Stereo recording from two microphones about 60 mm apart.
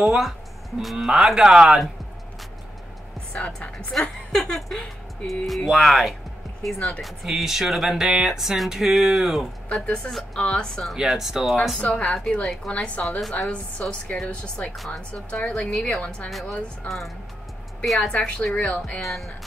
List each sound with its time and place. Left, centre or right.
0.0 s a man's voice: centre
3.3 s a woman's voice: left
5.2 s speech: centre
9.7 s a woman's voice: centre
11.0 s speech: centre
11.8 s a woman's voice: centre
16.3 s speech: centre
18.0 s a woman's voice: centre
18.9 s speech: centre